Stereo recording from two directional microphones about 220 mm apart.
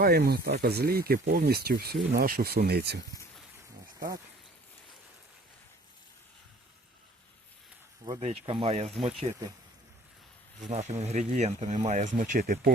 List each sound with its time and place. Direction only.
0.0 s speech: 45° right (ahead or behind)
8.0 s speech: 25° right (ahead or behind)
10.7 s speech: 30° right (ahead or behind)